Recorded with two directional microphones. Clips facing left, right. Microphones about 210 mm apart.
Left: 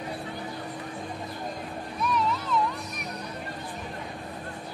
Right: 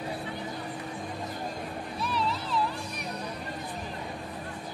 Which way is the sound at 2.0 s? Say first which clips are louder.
Left 4 dB; 30° right (ahead or behind).